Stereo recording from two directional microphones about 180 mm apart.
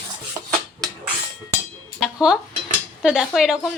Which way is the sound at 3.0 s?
5° right (ahead or behind).